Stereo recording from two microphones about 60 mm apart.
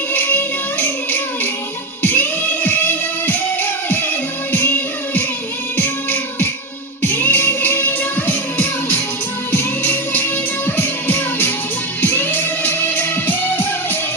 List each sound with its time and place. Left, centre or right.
0.1 s music: left